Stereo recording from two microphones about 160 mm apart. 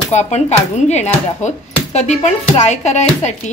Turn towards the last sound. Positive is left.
turn(degrees=45)  # may be behind; listen again after turning